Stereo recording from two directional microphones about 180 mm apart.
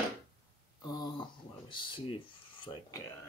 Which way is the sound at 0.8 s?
25° left (ahead or behind).